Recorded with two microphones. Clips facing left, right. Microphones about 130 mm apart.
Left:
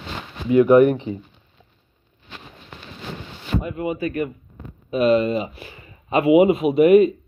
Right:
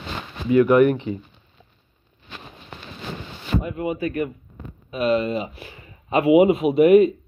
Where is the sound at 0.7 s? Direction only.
35° left (ahead or behind).